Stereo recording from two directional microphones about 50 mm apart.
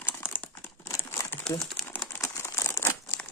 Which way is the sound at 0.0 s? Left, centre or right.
Left.